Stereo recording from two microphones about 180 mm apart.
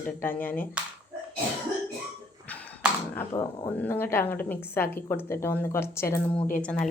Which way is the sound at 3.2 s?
15° left (ahead or behind).